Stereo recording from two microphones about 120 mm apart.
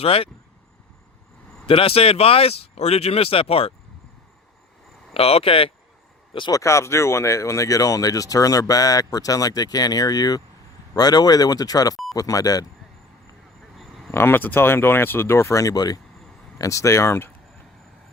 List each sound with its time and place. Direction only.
0.0 s speech: 50° left (ahead or behind)
1.6 s speech: 50° left (ahead or behind)
5.1 s speech: 55° left (ahead or behind)
6.5 s speech: 25° left (ahead or behind)
13.7 s cricket: centre (ahead or behind)
14.1 s speech: 20° left (ahead or behind)